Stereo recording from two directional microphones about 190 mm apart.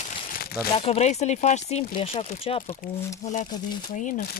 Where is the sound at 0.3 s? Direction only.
55° left (ahead or behind).